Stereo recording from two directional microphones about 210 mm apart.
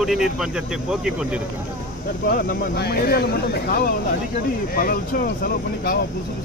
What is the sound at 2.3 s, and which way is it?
Speech, 50° left (ahead or behind).